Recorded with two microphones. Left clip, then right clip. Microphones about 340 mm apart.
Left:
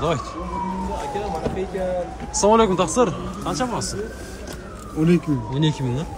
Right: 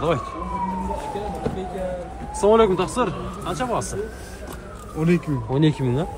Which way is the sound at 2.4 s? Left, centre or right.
Centre.